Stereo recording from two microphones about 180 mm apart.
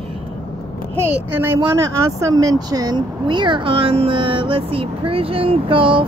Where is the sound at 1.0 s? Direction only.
10° right (ahead or behind).